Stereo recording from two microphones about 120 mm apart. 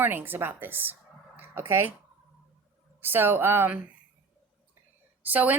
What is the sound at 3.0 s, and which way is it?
Speech, 20° right (ahead or behind).